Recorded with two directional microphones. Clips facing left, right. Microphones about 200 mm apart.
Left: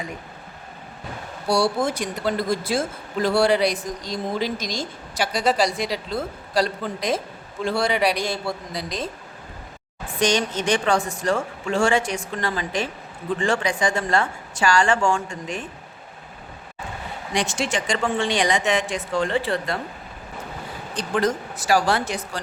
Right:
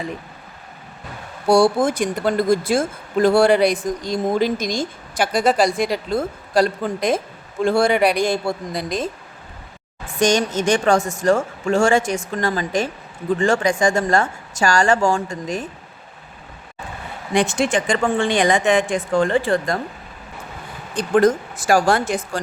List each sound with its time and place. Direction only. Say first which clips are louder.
1.5 s speech: right 6 dB; 50° right (ahead or behind)
10.2 s speech: right 4 dB; 45° right (ahead or behind)
17.3 s speech: right 6 dB; 55° right (ahead or behind)
20.9 s speech: right 7 dB; 50° right (ahead or behind)